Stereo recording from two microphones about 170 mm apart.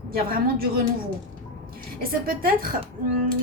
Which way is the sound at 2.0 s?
60° right (ahead or behind).